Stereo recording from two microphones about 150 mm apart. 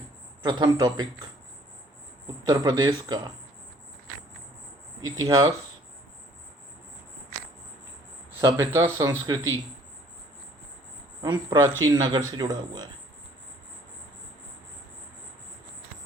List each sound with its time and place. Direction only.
0.4 s speech: 25° right (ahead or behind)
2.5 s speech: 25° right (ahead or behind)
5.0 s speech: 20° right (ahead or behind)
8.4 s speech: 20° right (ahead or behind)
11.2 s speech: 25° right (ahead or behind)